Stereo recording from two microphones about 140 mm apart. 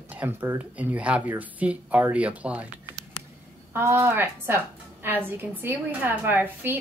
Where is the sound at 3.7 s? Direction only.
15° right (ahead or behind).